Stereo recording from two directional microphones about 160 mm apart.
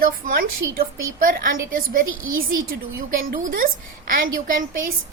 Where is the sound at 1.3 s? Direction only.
60° right (ahead or behind).